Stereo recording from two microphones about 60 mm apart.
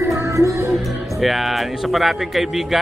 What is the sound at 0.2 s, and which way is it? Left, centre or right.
Music, right.